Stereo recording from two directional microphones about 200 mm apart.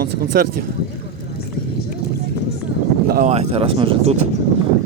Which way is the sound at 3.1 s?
40° right (ahead or behind).